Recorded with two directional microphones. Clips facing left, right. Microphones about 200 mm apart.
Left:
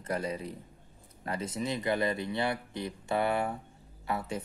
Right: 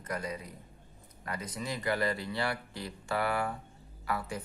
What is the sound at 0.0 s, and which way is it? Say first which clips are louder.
Speech: left 4 dB; 30° left (ahead or behind).